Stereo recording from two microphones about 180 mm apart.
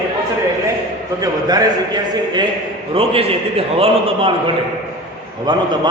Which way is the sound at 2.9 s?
30° right (ahead or behind).